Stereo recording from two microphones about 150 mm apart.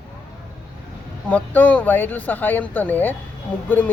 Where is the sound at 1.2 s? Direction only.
10° left (ahead or behind).